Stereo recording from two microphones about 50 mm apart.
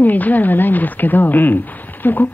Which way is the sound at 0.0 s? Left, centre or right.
Left.